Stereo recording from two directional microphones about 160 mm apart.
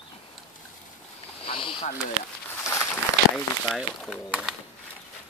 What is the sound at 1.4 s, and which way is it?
Speech, 35° left (ahead or behind).